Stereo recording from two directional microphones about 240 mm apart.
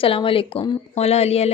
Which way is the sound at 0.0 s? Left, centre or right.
Left.